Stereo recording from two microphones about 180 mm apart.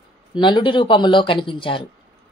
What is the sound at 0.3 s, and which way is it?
Speech, 25° left (ahead or behind).